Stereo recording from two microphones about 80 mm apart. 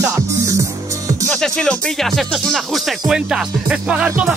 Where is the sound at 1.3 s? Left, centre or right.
Centre.